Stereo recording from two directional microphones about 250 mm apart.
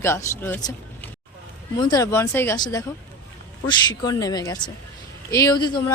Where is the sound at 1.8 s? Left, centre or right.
Centre.